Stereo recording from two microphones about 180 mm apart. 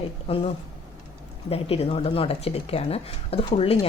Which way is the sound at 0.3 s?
30° left (ahead or behind).